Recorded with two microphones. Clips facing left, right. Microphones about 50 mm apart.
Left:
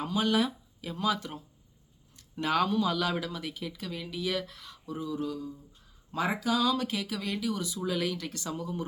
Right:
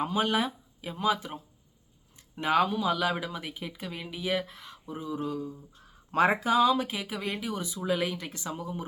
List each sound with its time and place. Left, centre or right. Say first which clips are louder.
0.0 s speech: even; right
5.8 s speech: right 7 dB; right; by 8.8 s centre